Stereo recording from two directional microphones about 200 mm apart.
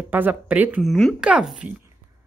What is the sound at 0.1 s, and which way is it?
Speech, 10° right (ahead or behind).